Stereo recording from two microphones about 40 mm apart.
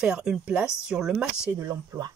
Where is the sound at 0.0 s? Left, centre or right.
Centre.